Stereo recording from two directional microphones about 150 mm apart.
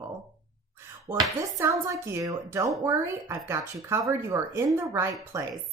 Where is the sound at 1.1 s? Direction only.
20° right (ahead or behind).